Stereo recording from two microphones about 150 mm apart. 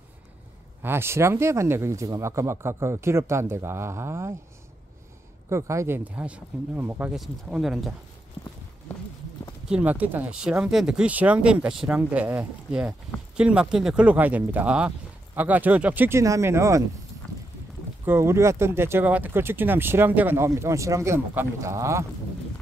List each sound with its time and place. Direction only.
0.8 s speech: 15° right (ahead or behind)
5.5 s speech: 20° right (ahead or behind); by 7.9 s 5° right (ahead or behind)
8.4 s clip-clop: 20° left (ahead or behind)
9.7 s speech: 10° right (ahead or behind)
18.0 s speech: 15° right (ahead or behind)